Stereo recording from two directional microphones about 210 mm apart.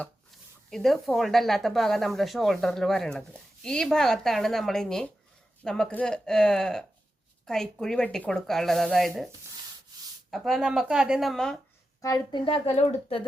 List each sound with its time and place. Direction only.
0.7 s speech: centre (ahead or behind)
10.3 s speech: centre (ahead or behind)
12.0 s speech: 20° left (ahead or behind)